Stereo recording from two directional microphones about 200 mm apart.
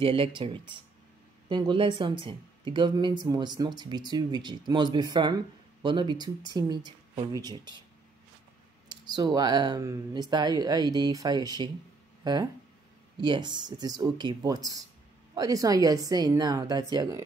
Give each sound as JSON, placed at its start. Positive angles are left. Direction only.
{"t": 0.0, "sound": "speech", "side_deg": -25}
{"t": 8.8, "sound": "a woman's voice", "side_deg": -20}